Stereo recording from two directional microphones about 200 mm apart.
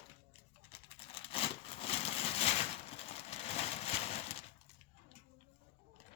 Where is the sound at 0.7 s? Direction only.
30° left (ahead or behind).